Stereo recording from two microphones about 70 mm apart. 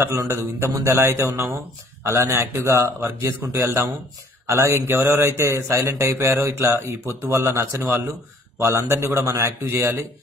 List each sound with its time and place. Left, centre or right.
0.2 s speech: right